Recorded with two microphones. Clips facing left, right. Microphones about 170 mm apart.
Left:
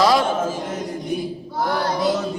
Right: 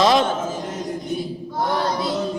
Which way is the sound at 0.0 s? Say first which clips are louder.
Even; 20° right (ahead or behind).